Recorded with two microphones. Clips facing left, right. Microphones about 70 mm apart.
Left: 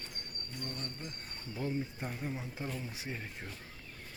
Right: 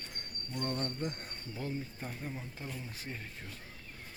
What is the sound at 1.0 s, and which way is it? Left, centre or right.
Speech, right.